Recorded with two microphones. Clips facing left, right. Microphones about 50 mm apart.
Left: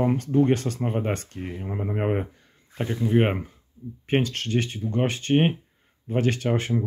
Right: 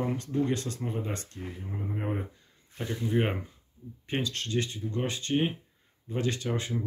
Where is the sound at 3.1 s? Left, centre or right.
Left.